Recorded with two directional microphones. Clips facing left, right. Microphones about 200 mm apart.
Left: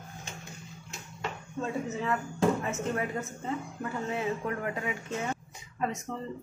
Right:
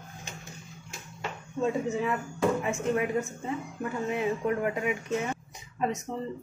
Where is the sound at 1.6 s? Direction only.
15° right (ahead or behind).